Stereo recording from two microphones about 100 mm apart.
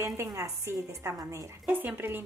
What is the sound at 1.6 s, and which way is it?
Speech, 20° right (ahead or behind).